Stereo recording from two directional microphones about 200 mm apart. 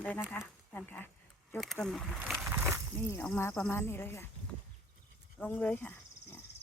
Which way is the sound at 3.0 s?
10° left (ahead or behind).